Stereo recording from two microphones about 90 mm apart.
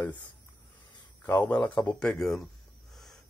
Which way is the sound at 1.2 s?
20° left (ahead or behind).